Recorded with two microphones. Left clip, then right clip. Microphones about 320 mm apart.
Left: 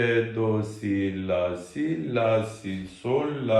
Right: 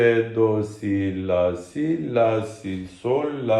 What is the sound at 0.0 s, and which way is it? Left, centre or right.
Mantra, right.